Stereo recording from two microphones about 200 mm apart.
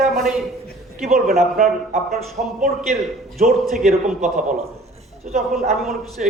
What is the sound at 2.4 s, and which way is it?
Speech, 40° right (ahead or behind).